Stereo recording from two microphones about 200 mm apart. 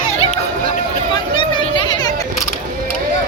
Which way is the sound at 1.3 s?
25° left (ahead or behind).